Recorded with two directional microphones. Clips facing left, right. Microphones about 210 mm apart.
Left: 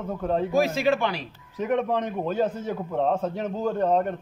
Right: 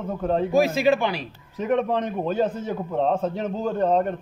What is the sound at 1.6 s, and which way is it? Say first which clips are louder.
A man's voice: right 2 dB; 10° left (ahead or behind).